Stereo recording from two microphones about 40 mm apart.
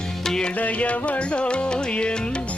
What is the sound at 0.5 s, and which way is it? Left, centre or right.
Music, left.